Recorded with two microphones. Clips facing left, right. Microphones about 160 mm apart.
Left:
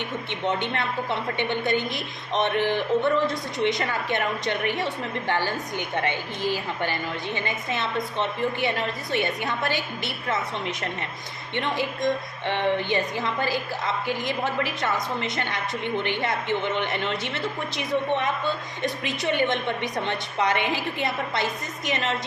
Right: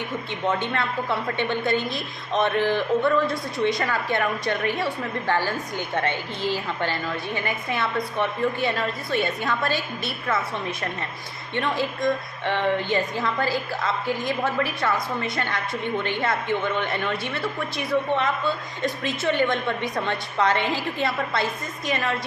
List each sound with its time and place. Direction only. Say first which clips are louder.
0.3 s a woman's voice: right 1 dB; 20° left (ahead or behind)